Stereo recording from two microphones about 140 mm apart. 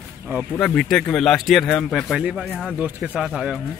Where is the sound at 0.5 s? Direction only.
5° left (ahead or behind).